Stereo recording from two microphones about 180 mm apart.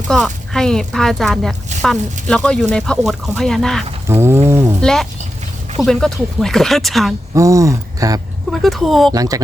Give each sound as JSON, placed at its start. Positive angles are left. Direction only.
{"t": 0.1, "sound": "speech", "side_deg": 0}
{"t": 4.0, "sound": "speech", "side_deg": -15}
{"t": 4.4, "sound": "a sound", "side_deg": -15}
{"t": 4.8, "sound": "speech", "side_deg": 5}
{"t": 7.3, "sound": "speech", "side_deg": -15}
{"t": 8.4, "sound": "speech", "side_deg": 0}
{"t": 9.1, "sound": "speech", "side_deg": -20}